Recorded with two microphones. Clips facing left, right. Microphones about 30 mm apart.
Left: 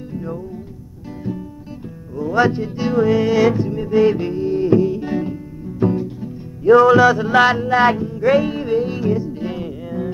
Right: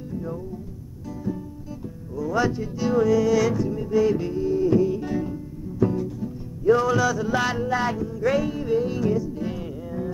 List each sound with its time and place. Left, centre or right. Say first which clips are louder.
0.1 s music: left 3 dB; left
2.1 s music: left 7 dB; left
7.8 s music: left 10 dB; left
8.2 s music: left 7 dB; left
8.5 s music: left 4 dB; left
8.7 s music: left 3 dB; left